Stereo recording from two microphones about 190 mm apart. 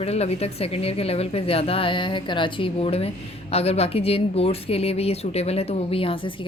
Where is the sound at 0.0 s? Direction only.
35° left (ahead or behind).